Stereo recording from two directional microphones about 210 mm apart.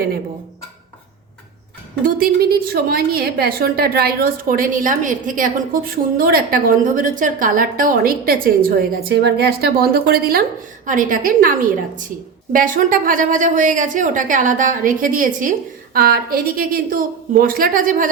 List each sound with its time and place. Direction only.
2.0 s a woman's voice: 45° right (ahead or behind)
12.5 s a woman's voice: 40° right (ahead or behind)